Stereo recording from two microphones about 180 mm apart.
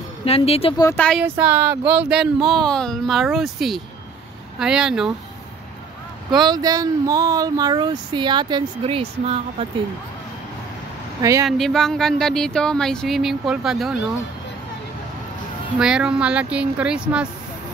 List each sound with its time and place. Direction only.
0.2 s speech: 35° left (ahead or behind)
0.9 s speech: 5° left (ahead or behind)
1.2 s speech: 10° right (ahead or behind)
6.3 s speech: 25° right (ahead or behind)
11.1 s speech: 20° right (ahead or behind)
11.4 s speech: centre (ahead or behind)
15.8 s speech: 5° right (ahead or behind)